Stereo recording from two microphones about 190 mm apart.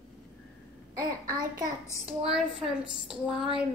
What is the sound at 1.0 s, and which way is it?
Speech, 20° right (ahead or behind).